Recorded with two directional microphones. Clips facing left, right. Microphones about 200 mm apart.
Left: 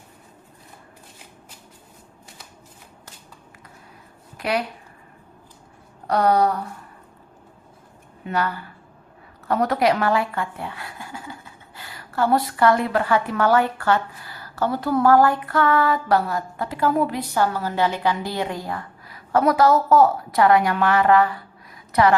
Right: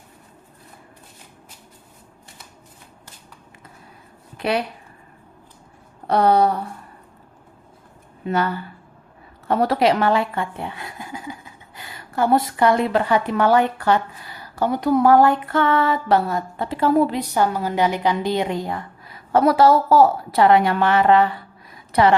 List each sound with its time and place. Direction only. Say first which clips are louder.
6.1 s speech: right 2 dB; 25° right (ahead or behind)
8.3 s speech: right 3 dB; 25° right (ahead or behind)